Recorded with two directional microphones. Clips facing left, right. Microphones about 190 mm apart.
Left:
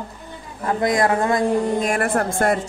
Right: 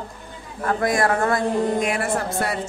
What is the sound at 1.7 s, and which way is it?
Speech, 45° left (ahead or behind).